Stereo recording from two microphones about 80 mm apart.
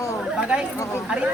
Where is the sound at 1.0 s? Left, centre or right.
Centre.